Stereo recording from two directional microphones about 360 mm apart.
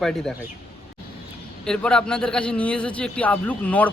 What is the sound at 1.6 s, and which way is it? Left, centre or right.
A man's voice, centre.